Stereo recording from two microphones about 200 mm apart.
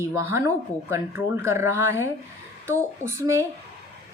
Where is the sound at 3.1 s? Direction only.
15° right (ahead or behind).